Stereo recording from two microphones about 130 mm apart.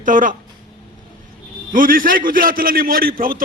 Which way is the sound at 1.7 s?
90° right.